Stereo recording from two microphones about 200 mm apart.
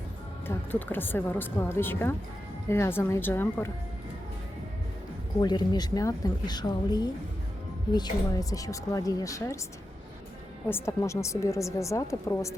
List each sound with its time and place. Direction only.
0.4 s speech: 10° left (ahead or behind)
5.4 s speech: 20° left (ahead or behind)
10.7 s speech: 15° left (ahead or behind)